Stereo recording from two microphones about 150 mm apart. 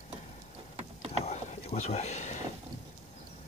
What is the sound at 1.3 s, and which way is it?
Rowboat, 45° left (ahead or behind).